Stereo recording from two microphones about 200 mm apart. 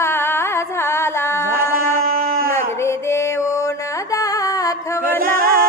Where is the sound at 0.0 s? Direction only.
10° left (ahead or behind).